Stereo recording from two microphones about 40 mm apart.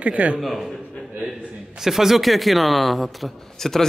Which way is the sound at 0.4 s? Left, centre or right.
Centre.